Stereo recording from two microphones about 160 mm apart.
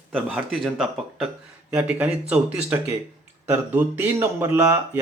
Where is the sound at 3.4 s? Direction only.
10° right (ahead or behind).